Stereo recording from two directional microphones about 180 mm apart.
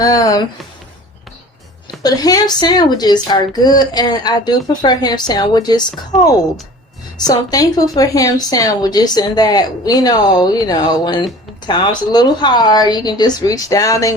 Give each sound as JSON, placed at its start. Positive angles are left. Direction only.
{"t": 0.0, "sound": "a woman's voice", "side_deg": 20}
{"t": 2.0, "sound": "a woman's voice", "side_deg": 20}